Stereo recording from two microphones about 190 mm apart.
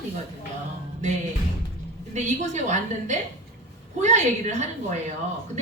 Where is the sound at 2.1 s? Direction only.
40° right (ahead or behind).